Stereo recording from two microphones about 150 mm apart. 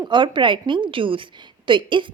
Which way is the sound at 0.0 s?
30° right (ahead or behind).